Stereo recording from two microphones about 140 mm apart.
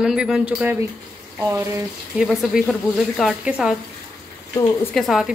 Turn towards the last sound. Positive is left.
turn(degrees=0)  # may be behind; listen again after turning